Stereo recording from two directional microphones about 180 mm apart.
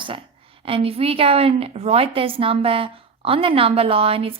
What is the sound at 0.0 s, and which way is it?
A woman's voice, 30° right (ahead or behind).